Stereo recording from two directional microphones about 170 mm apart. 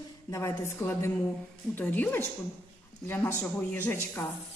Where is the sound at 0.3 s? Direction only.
15° left (ahead or behind).